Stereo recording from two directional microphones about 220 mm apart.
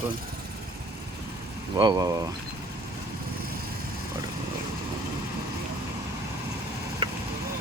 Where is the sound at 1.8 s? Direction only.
15° right (ahead or behind).